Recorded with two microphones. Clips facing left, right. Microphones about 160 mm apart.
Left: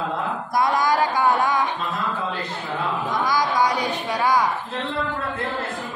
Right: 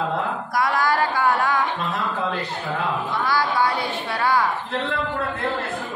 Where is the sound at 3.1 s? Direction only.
15° left (ahead or behind).